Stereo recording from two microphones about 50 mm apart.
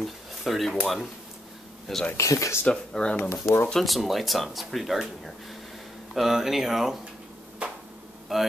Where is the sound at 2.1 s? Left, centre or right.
Left.